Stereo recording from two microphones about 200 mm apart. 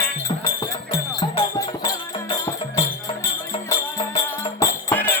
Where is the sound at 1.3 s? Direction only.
25° left (ahead or behind).